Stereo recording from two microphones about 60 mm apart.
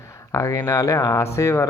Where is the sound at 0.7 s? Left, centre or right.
Left.